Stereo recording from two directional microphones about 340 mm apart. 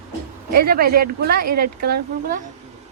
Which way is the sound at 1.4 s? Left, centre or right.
Right.